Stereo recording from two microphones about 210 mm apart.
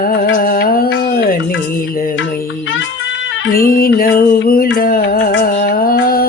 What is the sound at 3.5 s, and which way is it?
Music, 45° left (ahead or behind).